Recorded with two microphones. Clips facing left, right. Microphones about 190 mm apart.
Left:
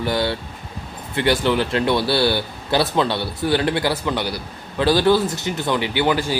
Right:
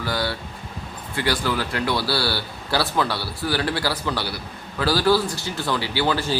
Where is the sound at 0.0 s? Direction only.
25° left (ahead or behind).